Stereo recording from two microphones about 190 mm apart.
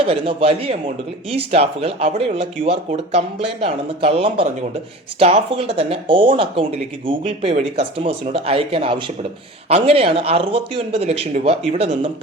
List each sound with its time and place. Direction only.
0.0 s speech: 30° right (ahead or behind)